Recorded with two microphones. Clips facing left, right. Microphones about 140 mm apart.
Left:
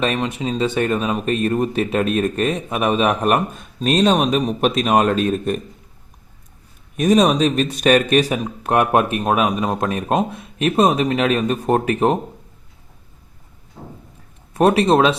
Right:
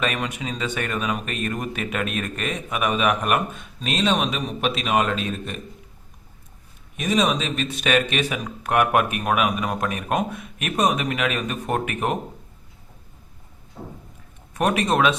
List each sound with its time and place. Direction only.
0.0 s speech: 30° left (ahead or behind)
6.9 s speech: 45° left (ahead or behind)
14.5 s speech: 30° left (ahead or behind)